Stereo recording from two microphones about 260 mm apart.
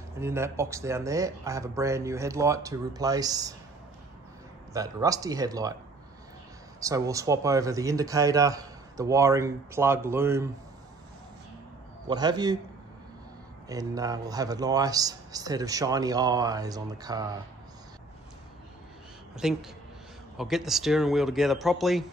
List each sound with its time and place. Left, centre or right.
0.2 s speech: centre
4.7 s speech: centre
6.8 s speech: centre
12.1 s speech: centre
13.7 s speech: centre
19.3 s speech: centre